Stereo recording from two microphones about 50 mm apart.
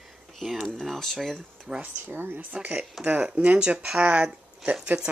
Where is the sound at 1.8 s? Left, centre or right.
Right.